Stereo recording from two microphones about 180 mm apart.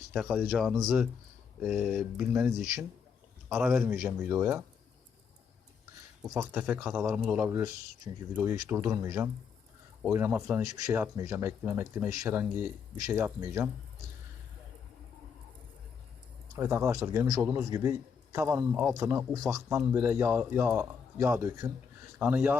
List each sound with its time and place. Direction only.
0.1 s a man's voice: 5° right (ahead or behind)
6.2 s a man's voice: 15° right (ahead or behind)
16.6 s a man's voice: 15° right (ahead or behind)